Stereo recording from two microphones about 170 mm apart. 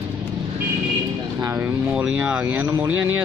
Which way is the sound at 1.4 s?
15° right (ahead or behind).